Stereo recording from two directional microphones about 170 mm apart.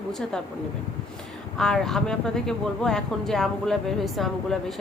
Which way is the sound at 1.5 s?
5° left (ahead or behind).